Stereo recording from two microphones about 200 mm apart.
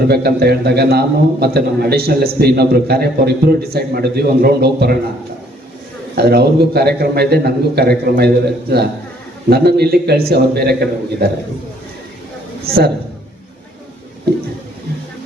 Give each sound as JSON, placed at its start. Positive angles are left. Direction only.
{"t": 0.1, "sound": "a man's voice", "side_deg": -50}
{"t": 6.1, "sound": "a man's voice", "side_deg": -55}
{"t": 9.5, "sound": "a man's voice", "side_deg": -55}
{"t": 12.6, "sound": "a man's voice", "side_deg": -50}